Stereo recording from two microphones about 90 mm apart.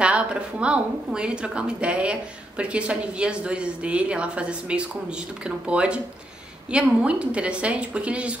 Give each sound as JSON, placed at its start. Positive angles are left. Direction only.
{"t": 0.0, "sound": "a woman's voice", "side_deg": -10}